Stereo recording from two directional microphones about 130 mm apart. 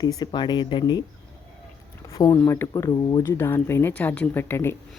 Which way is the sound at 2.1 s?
25° left (ahead or behind).